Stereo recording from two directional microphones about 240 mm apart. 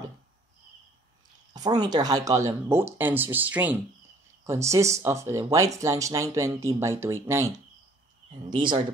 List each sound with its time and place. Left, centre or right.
1.5 s speech: centre